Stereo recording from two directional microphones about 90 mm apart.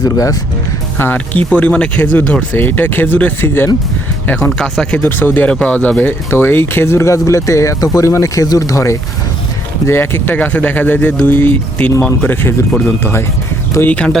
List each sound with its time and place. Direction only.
0.0 s speech: 40° left (ahead or behind)
0.9 s speech: 20° left (ahead or behind)
4.4 s speech: 5° left (ahead or behind)
5.0 s speech: 20° left (ahead or behind)